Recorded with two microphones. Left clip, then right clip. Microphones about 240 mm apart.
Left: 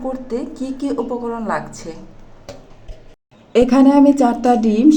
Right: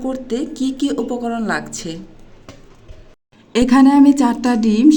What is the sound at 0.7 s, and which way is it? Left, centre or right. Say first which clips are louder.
Speech: left 1 dB; right.